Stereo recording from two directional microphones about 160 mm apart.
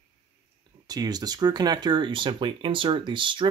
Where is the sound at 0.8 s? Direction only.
25° right (ahead or behind).